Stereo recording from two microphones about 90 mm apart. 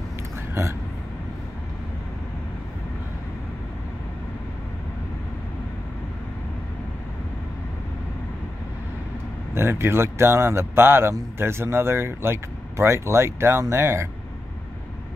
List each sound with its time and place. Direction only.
9.5 s a man's voice: 25° right (ahead or behind)